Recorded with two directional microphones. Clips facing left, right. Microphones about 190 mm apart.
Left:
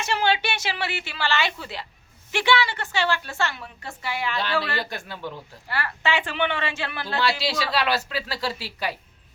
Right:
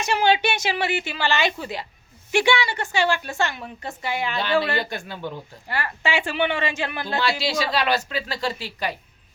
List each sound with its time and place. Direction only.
0.0 s a woman's voice: 15° right (ahead or behind)
4.8 s a woman's voice: centre (ahead or behind)
5.6 s a woman's voice: 15° right (ahead or behind)
7.2 s a woman's voice: centre (ahead or behind)